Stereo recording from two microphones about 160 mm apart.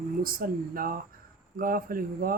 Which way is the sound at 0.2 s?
65° right (ahead or behind).